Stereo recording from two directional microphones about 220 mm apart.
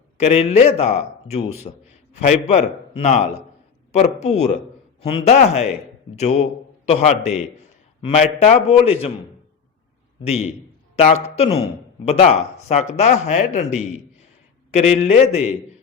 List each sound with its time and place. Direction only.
0.2 s a man's voice: 30° left (ahead or behind)
10.2 s a man's voice: 30° left (ahead or behind)